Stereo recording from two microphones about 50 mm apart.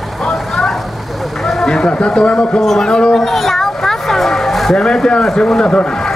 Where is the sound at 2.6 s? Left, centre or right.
Centre.